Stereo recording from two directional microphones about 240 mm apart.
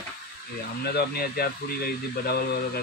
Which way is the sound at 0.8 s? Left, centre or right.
Left.